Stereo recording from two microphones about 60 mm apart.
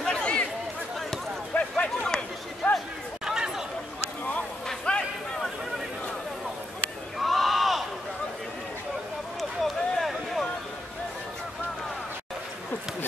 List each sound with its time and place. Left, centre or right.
0.0 s chatter: centre
1.6 s a sound: centre
3.3 s chatter: centre
4.6 s a sound: centre
7.2 s sheep: centre
9.4 s run: centre